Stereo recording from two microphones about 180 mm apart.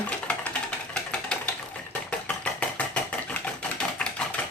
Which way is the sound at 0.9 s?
5° left (ahead or behind).